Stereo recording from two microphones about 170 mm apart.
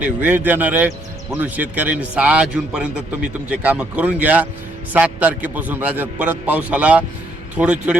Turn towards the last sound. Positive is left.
turn(degrees=-5)  # may be behind; listen again after turning